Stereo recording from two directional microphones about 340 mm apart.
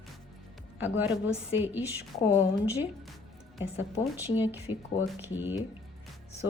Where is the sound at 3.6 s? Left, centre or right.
Centre.